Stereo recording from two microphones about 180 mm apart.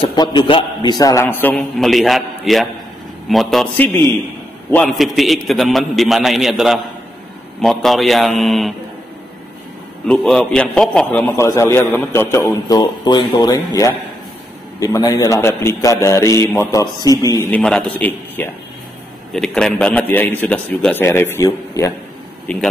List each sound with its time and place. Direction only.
0.0 s a man's voice: 25° left (ahead or behind); by 8.7 s centre (ahead or behind)
10.0 s a man's voice: 5° left (ahead or behind)